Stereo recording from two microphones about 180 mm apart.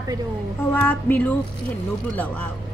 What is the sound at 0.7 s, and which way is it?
Speech, 10° left (ahead or behind).